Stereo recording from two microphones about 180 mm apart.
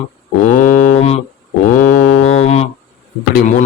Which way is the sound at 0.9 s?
35° left (ahead or behind).